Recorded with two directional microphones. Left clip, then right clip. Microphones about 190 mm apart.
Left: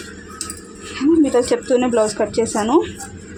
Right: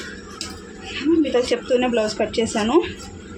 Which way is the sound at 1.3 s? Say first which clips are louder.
Left 3 dB; 40° left (ahead or behind).